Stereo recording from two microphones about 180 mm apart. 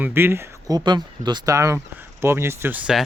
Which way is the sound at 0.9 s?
25° right (ahead or behind).